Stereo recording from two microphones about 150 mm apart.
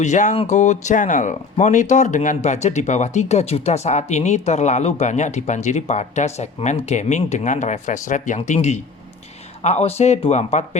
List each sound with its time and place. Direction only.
0.0 s speech: 55° left (ahead or behind)